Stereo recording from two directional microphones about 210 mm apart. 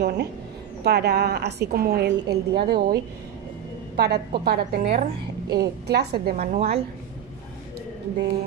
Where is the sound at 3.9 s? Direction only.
50° right (ahead or behind).